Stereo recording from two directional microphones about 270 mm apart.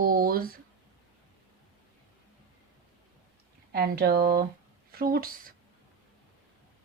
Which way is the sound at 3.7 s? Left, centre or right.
Right.